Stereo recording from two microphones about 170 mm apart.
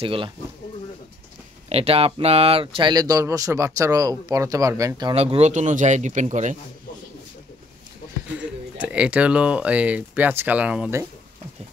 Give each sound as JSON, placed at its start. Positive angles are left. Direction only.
{"t": 0.0, "sound": "speech", "side_deg": -30}
{"t": 1.7, "sound": "speech", "side_deg": -35}
{"t": 5.1, "sound": "speech", "side_deg": -40}
{"t": 8.7, "sound": "speech", "side_deg": -5}